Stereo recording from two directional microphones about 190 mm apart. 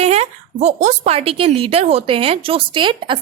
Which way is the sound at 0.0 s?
35° right (ahead or behind).